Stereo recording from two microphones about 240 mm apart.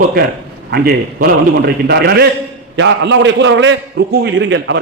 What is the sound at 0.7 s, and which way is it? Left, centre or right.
A man's voice, right.